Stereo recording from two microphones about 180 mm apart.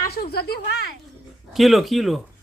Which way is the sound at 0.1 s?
60° left (ahead or behind).